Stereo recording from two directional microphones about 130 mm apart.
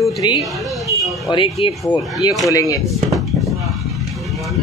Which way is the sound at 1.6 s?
45° left (ahead or behind).